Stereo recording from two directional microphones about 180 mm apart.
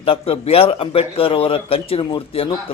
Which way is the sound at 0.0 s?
30° left (ahead or behind).